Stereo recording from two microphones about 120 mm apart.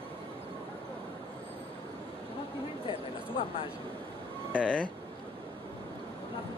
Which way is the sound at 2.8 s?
45° left (ahead or behind).